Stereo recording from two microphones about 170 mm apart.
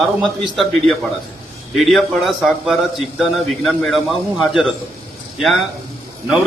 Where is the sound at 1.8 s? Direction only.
Centre (ahead or behind).